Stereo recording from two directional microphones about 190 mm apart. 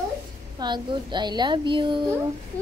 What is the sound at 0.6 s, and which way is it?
A woman's voice, 25° right (ahead or behind).